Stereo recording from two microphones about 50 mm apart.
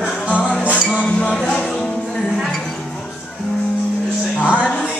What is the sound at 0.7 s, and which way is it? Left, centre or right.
Music, centre.